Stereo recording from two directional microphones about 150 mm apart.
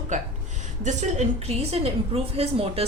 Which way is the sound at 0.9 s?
50° right (ahead or behind).